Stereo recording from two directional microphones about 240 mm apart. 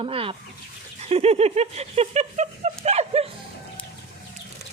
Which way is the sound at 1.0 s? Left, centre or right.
Right.